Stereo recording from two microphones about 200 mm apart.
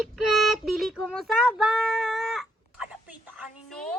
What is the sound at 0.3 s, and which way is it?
Child singing, centre (ahead or behind).